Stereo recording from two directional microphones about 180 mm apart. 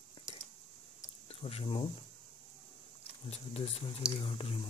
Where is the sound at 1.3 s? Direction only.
35° left (ahead or behind).